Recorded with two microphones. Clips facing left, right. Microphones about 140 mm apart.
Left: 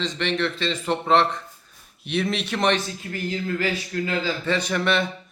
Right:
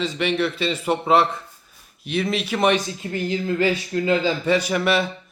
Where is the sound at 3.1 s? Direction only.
25° right (ahead or behind).